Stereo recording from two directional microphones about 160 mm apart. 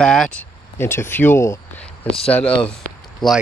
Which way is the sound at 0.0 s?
5° left (ahead or behind).